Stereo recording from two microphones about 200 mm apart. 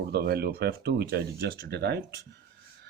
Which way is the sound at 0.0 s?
55° right (ahead or behind).